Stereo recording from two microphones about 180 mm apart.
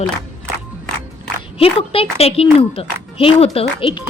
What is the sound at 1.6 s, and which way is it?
A woman's voice, 30° left (ahead or behind).